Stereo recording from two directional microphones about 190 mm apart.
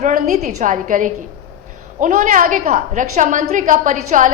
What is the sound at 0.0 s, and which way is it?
A woman's voice, 40° right (ahead or behind).